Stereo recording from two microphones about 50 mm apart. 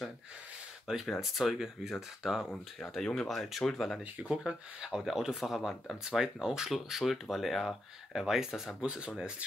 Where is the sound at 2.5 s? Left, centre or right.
Centre.